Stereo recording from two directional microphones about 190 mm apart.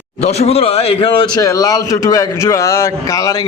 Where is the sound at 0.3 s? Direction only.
35° left (ahead or behind).